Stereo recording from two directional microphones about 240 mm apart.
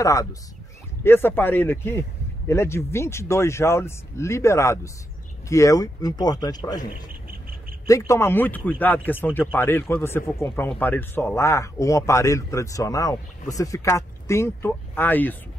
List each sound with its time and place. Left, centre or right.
0.0 s speech: centre